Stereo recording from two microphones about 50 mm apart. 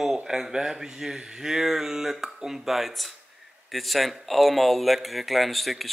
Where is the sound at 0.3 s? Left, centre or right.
Centre.